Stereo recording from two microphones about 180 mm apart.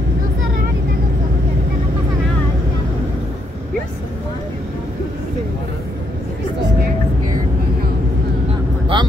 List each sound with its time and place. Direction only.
8.9 s vehicle: 25° right (ahead or behind)